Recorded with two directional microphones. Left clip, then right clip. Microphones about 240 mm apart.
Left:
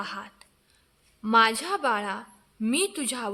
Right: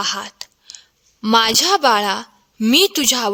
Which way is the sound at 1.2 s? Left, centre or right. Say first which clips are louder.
Right 7 dB; right.